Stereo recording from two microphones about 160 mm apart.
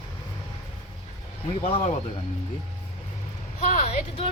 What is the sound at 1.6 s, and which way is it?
Speech, 35° left (ahead or behind).